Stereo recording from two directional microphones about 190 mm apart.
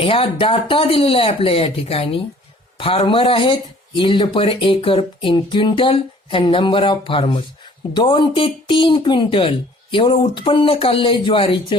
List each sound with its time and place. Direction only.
0.0 s speech: 30° left (ahead or behind)